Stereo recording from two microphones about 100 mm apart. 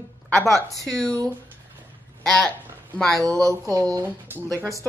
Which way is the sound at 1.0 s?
35° right (ahead or behind).